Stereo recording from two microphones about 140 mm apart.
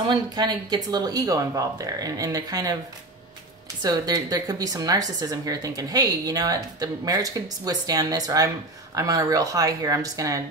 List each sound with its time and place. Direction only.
0.1 s a woman's voice: 30° right (ahead or behind)
3.8 s a woman's voice: 30° right (ahead or behind)